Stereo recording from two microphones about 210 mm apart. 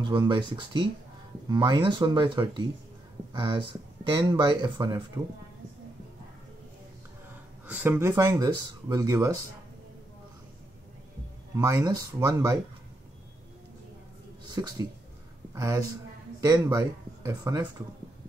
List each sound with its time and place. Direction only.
0.0 s speech: 20° right (ahead or behind)
7.6 s speech: 10° right (ahead or behind)
11.5 s speech: 15° right (ahead or behind)
14.5 s speech: 20° right (ahead or behind)